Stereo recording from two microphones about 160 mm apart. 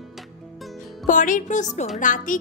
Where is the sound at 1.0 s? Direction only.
55° left (ahead or behind).